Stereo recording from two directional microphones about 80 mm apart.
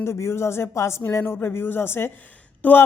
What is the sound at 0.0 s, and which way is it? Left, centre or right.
A man's voice, left.